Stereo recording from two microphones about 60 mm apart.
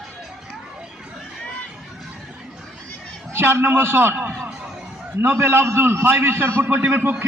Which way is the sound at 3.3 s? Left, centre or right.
Right.